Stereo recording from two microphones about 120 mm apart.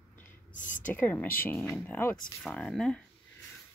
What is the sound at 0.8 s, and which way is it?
Speech, 15° left (ahead or behind).